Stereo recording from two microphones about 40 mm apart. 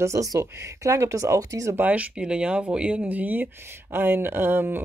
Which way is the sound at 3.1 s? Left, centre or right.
Right.